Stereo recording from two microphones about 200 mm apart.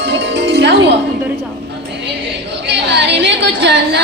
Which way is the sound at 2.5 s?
60° right (ahead or behind).